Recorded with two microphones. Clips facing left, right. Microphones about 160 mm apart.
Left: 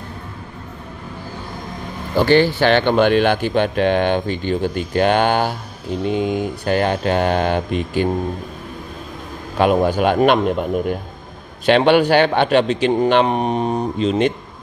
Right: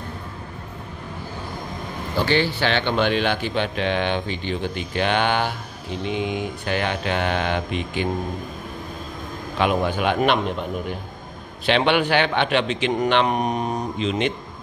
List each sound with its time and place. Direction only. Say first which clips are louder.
2.1 s a man's voice: left 7 dB; 45° left (ahead or behind)
9.6 s speech: left 6 dB; 40° left (ahead or behind)
11.6 s a man's voice: left 6 dB; 45° left (ahead or behind)